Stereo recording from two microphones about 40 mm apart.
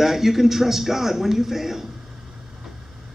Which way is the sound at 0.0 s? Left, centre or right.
Centre.